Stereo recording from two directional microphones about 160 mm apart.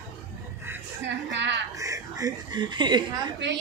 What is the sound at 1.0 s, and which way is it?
Speech, 90° right.